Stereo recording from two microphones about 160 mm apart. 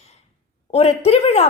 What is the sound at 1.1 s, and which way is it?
Speech, 40° left (ahead or behind).